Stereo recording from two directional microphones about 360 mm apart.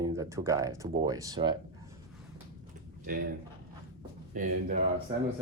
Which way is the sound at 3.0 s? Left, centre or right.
Right.